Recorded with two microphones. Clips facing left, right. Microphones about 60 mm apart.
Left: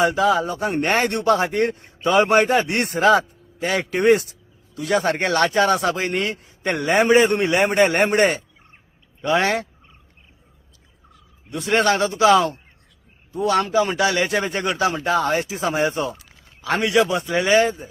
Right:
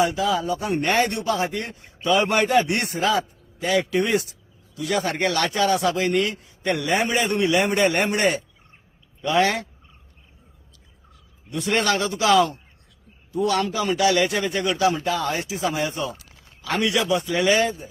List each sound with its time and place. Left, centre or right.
0.0 s speech: left
4.8 s a man's voice: left
11.5 s a man's voice: left